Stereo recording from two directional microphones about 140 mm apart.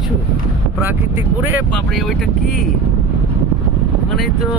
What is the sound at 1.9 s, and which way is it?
Speech, centre (ahead or behind).